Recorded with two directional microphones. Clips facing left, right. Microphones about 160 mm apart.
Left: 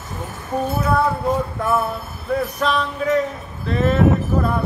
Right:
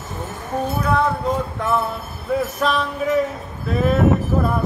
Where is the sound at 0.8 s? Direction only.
5° left (ahead or behind).